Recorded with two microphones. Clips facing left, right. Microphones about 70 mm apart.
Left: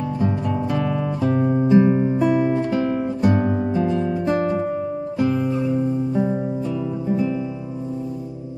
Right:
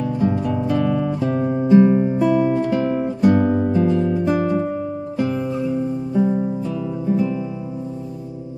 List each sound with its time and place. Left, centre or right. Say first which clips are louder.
0.7 s guitar: right 5 dB; centre
1.7 s music: right 4 dB; centre